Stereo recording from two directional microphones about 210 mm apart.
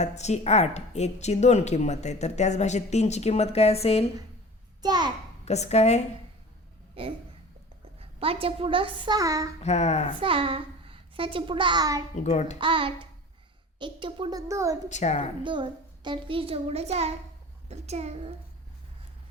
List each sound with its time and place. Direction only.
0.0 s speech: 30° left (ahead or behind)
4.8 s a child's voice: 20° right (ahead or behind)
5.5 s speech: 30° left (ahead or behind)
7.0 s a child's voice: 25° right (ahead or behind)
8.2 s a child's voice: 25° right (ahead or behind)
9.6 s speech: 30° left (ahead or behind)
10.2 s a child's voice: 25° right (ahead or behind)
12.2 s speech: 35° left (ahead or behind)
12.5 s a child's voice: 25° right (ahead or behind)
14.8 s speech: 35° left (ahead or behind)
15.4 s a child's voice: 20° right (ahead or behind)